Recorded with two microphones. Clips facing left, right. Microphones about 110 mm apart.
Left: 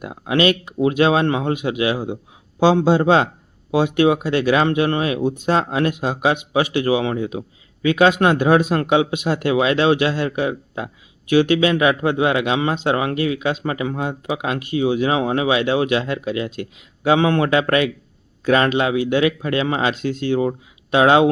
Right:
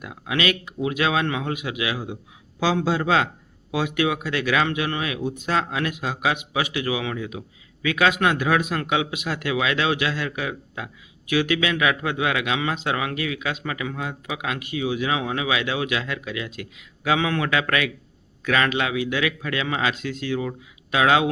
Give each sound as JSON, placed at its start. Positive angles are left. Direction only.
{"t": 0.0, "sound": "a man's voice", "side_deg": 35}